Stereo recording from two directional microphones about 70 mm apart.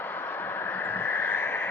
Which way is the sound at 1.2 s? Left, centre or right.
Left.